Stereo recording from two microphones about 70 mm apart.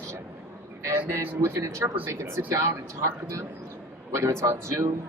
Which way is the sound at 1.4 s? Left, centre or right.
Right.